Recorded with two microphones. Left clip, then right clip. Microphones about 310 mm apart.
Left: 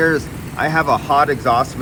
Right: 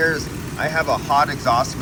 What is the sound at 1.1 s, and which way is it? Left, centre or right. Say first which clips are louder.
Speech: left 1 dB; centre.